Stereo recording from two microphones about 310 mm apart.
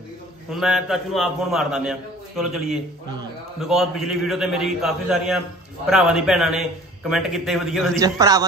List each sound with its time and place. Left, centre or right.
0.5 s a man's voice: centre
8.0 s a man's voice: centre